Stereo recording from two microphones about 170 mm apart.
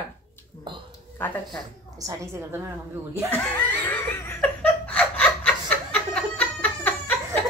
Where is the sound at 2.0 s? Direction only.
20° right (ahead or behind).